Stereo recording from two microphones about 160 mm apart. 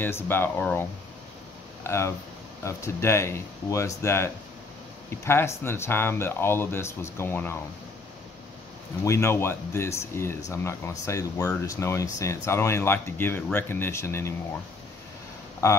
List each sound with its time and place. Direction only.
0.0 s speech: 15° left (ahead or behind)
9.0 s speech: 15° left (ahead or behind)